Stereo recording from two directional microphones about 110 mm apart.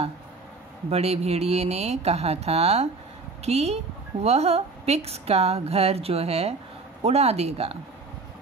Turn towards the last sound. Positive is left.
turn(degrees=-65)  # may be behind; listen again after turning